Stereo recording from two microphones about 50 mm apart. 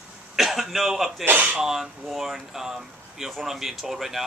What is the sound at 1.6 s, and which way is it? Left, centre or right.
Speech, centre.